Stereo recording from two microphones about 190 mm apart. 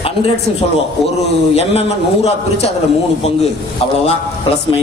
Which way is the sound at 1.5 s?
35° left (ahead or behind).